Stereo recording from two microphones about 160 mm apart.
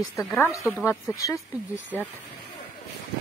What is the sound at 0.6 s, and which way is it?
Speech, 5° left (ahead or behind).